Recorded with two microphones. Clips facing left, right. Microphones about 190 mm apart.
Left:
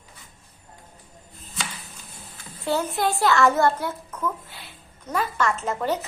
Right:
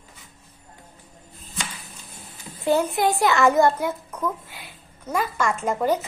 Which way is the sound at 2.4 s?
15° right (ahead or behind).